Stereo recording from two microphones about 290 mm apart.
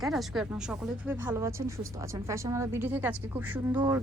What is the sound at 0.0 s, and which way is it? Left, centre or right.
A woman's voice, centre.